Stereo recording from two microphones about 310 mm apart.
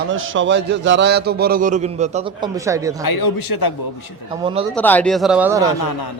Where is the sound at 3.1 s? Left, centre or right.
Left.